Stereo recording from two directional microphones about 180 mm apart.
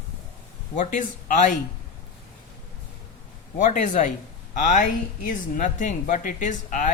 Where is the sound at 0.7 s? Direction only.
45° left (ahead or behind).